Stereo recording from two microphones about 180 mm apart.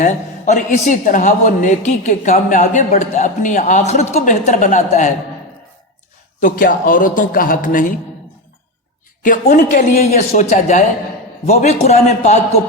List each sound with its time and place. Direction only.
0.0 s a woman's voice: 45° left (ahead or behind)
6.4 s a woman's voice: 50° left (ahead or behind)
9.2 s a woman's voice: 45° left (ahead or behind)